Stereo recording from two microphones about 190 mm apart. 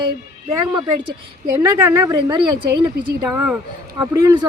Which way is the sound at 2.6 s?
60° right (ahead or behind).